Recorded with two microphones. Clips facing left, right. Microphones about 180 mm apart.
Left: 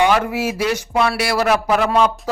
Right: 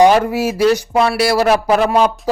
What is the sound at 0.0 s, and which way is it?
Speech, 35° right (ahead or behind).